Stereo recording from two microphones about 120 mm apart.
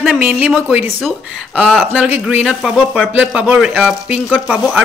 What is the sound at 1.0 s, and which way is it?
Speech, centre (ahead or behind).